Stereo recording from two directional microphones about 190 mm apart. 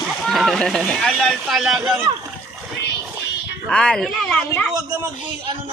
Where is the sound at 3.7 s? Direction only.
5° left (ahead or behind).